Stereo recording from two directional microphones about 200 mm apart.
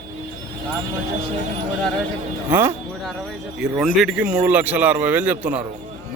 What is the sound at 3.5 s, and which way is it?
A man's voice, 5° right (ahead or behind).